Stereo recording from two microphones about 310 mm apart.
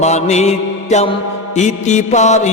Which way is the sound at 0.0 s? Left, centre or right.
Left.